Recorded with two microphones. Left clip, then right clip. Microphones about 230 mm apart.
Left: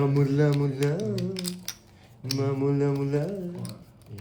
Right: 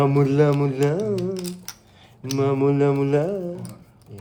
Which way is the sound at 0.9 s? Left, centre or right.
Centre.